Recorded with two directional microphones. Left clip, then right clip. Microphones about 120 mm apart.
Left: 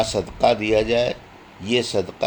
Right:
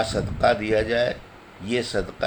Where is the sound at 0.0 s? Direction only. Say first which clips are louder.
Left 2 dB; 30° left (ahead or behind).